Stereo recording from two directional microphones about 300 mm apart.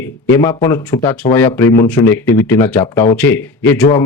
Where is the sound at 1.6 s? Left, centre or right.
Left.